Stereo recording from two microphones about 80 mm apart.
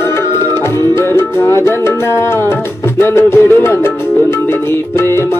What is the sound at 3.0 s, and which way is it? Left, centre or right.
Music, left.